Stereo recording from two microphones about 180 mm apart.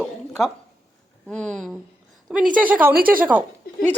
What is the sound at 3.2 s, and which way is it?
Speech, 10° right (ahead or behind).